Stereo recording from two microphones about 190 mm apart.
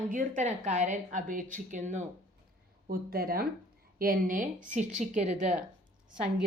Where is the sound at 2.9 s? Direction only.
50° right (ahead or behind).